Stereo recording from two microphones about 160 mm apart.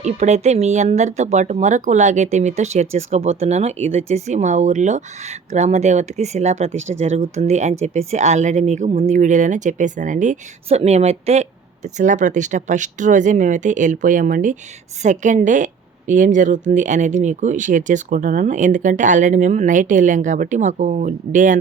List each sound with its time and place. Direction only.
0.0 s speech: 45° right (ahead or behind)